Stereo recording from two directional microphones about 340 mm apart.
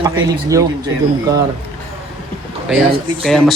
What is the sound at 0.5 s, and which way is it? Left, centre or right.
Speech, centre.